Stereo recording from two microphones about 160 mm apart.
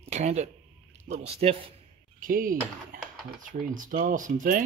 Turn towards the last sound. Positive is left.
turn(degrees=-55)  # may be behind; listen again after turning